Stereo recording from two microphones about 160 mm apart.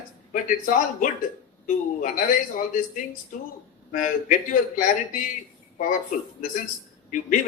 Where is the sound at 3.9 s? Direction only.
55° left (ahead or behind).